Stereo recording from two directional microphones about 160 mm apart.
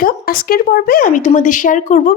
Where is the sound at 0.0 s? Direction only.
65° left (ahead or behind).